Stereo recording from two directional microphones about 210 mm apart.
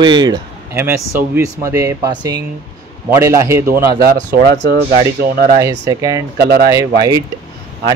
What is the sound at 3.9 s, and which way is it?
Speech, 45° right (ahead or behind).